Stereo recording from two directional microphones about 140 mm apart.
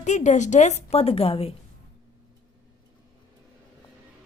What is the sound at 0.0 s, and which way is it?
A woman's voice, 60° left (ahead or behind).